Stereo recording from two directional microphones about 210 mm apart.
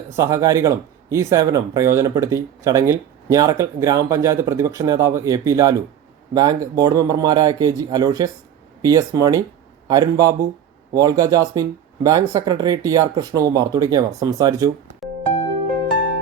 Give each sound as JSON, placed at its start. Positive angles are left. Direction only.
{"t": 0.2, "sound": "a man's voice", "side_deg": -15}